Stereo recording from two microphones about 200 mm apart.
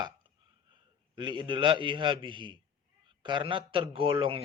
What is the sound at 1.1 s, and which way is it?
A man's voice, 25° right (ahead or behind).